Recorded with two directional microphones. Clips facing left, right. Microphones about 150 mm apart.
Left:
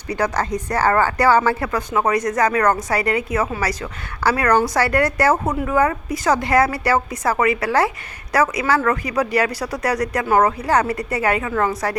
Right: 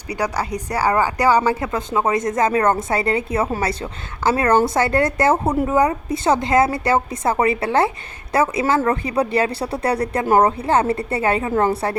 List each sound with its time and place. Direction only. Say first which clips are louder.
0.1 s speech: left 2 dB; 15° right (ahead or behind); by 11.9 s 30° right (ahead or behind)